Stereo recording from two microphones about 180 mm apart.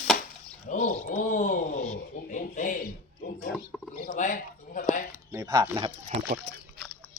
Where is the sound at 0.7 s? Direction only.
45° left (ahead or behind).